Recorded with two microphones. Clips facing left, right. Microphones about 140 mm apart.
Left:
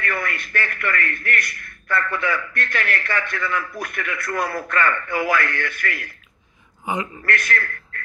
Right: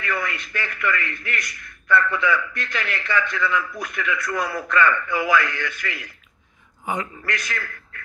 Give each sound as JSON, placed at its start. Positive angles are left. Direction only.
{"t": 0.0, "sound": "a man's voice", "side_deg": 55}
{"t": 7.2, "sound": "a man's voice", "side_deg": 55}